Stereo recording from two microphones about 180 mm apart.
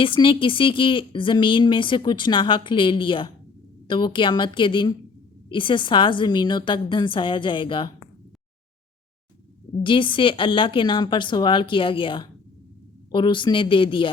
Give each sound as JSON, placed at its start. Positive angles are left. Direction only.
{"t": 0.0, "sound": "speech", "side_deg": 30}
{"t": 9.8, "sound": "speech", "side_deg": 25}